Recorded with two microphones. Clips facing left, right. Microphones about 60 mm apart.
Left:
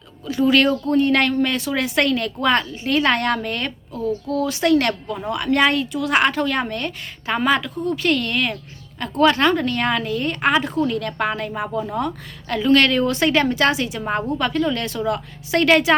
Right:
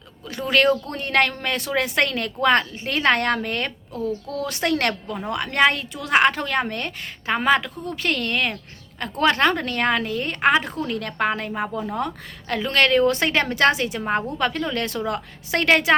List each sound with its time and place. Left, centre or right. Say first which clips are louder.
0.3 s a woman's voice: left 3 dB; right
3.9 s speech: left 5 dB; left
4.4 s a woman's voice: left 4 dB; right